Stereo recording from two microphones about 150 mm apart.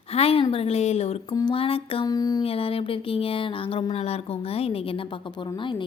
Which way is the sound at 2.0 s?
25° left (ahead or behind).